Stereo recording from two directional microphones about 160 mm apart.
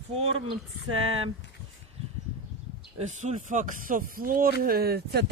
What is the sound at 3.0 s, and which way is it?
Speech, 50° right (ahead or behind).